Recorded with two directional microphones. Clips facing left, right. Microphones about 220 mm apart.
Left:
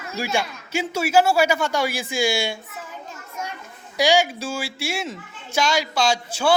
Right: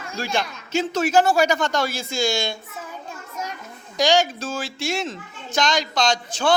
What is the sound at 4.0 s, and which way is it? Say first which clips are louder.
Speech: even; 10° left (ahead or behind).